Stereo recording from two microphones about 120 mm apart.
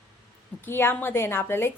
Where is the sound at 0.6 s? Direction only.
20° left (ahead or behind).